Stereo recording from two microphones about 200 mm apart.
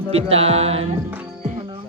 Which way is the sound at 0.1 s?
30° right (ahead or behind).